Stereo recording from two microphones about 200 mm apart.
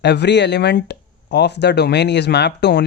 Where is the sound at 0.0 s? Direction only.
60° left (ahead or behind).